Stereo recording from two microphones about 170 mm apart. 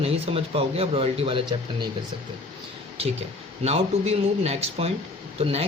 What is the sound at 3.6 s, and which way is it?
Speech, 40° right (ahead or behind).